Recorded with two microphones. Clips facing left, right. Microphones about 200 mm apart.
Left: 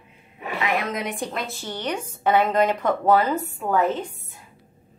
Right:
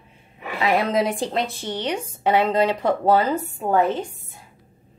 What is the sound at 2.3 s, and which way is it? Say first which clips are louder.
A woman's voice: right 1 dB; 30° right (ahead or behind).